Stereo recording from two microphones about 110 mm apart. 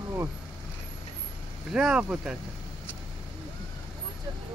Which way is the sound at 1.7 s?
5° right (ahead or behind).